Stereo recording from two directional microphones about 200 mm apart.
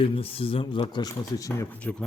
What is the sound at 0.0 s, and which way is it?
Speech, 25° left (ahead or behind).